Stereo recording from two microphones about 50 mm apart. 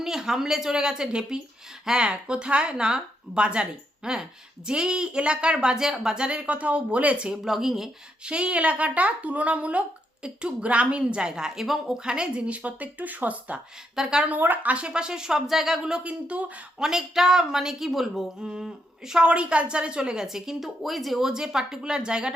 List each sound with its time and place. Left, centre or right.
0.0 s speech: centre
6.2 s a woman's voice: right
7.4 s speech: centre
8.2 s a woman's voice: right
13.9 s a woman's voice: centre
14.3 s speech: right
16.7 s speech: centre
19.2 s speech: right